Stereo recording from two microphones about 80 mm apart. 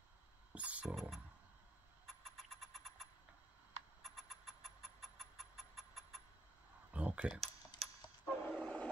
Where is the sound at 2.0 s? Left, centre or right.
Centre.